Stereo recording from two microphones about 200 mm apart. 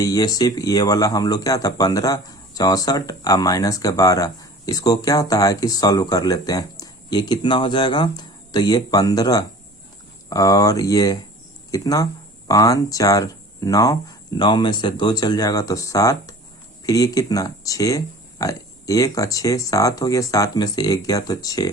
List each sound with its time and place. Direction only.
0.0 s speech: 20° left (ahead or behind)